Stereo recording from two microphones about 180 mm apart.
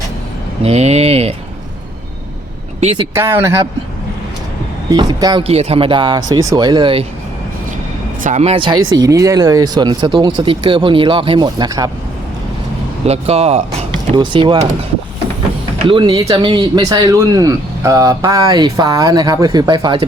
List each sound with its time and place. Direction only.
0.6 s speech: 35° right (ahead or behind)
3.2 s speech: 15° right (ahead or behind)
4.9 s speech: 20° right (ahead or behind)
5.5 s speech: 35° right (ahead or behind)
8.2 s speech: 40° right (ahead or behind); by 11.9 s 20° right (ahead or behind)
13.1 s speech: 35° right (ahead or behind)
14.2 s speech: 25° right (ahead or behind)
15.9 s speech: 25° right (ahead or behind)